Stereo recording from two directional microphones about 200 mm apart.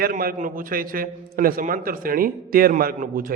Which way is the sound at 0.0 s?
45° right (ahead or behind).